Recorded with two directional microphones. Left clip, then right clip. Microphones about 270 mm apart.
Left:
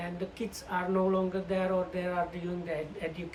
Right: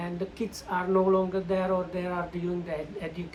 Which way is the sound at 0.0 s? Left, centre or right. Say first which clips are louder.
Right 3 dB; centre.